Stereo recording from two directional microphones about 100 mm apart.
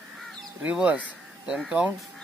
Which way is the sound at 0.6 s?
15° right (ahead or behind).